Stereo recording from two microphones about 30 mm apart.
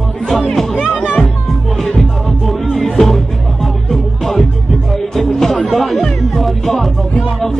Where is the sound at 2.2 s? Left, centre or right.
Centre.